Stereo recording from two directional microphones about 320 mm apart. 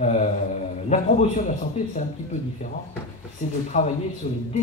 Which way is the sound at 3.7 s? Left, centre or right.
Left.